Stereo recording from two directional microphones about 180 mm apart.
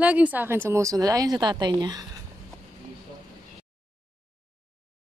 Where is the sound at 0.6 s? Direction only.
15° right (ahead or behind).